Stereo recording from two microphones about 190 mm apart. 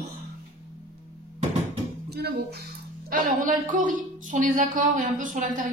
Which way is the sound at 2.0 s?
60° right (ahead or behind).